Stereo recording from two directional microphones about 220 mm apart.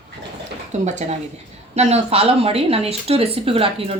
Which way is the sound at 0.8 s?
30° right (ahead or behind).